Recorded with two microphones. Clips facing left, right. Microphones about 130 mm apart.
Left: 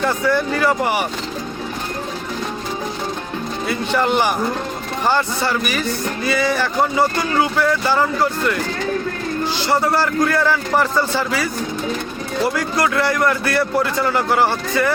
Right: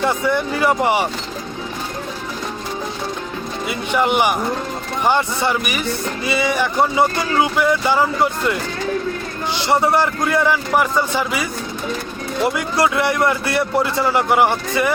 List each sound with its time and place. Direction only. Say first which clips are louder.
0.0 s a man's voice: even; 20° right (ahead or behind)
3.9 s a man's voice: right 1 dB; 15° right (ahead or behind)
9.6 s a man's voice: right 2 dB; 25° right (ahead or behind)
12.5 s a man's voice: right 1 dB; 20° right (ahead or behind)